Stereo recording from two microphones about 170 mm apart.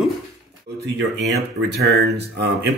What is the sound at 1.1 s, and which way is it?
Speech, 85° right.